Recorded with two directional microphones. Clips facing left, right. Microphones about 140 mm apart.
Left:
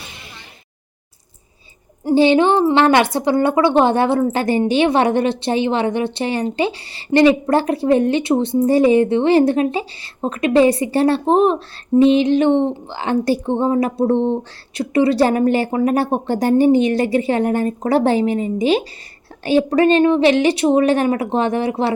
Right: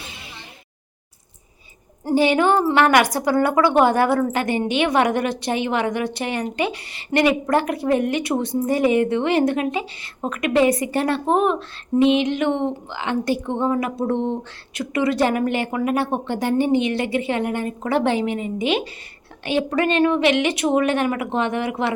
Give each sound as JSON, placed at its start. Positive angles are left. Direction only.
{"t": 2.1, "sound": "a woman's voice", "side_deg": 25}